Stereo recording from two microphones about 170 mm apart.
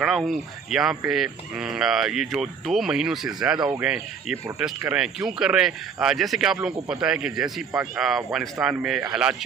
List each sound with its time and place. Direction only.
0.0 s speech: centre (ahead or behind)